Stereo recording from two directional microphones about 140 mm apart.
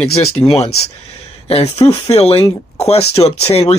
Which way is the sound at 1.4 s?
45° left (ahead or behind).